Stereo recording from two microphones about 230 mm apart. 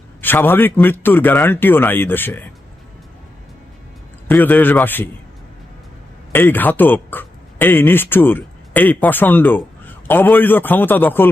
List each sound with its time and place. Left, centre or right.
0.2 s a man's voice: centre
4.3 s a man's voice: centre
6.3 s speech: centre